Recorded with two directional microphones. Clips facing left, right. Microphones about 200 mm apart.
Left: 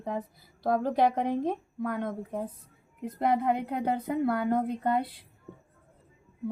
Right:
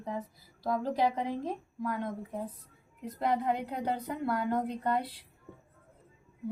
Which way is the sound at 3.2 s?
55° left (ahead or behind).